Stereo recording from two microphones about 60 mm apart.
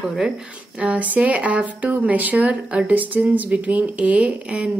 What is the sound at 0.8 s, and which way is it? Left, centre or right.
Speech, right.